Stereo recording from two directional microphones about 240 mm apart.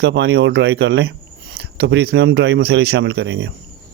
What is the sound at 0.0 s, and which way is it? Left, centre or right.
A man's voice, right.